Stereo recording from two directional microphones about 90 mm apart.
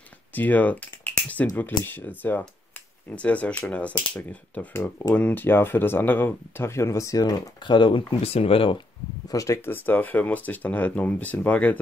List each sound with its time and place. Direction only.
0.3 s typing: 20° left (ahead or behind)
1.6 s speech: 20° left (ahead or behind)
4.7 s speech: 30° left (ahead or behind); by 8.8 s 80° left
9.3 s speech: 40° left (ahead or behind)
9.7 s speech: 20° left (ahead or behind)